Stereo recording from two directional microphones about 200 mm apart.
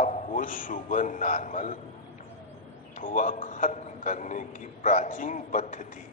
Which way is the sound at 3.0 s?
40° left (ahead or behind).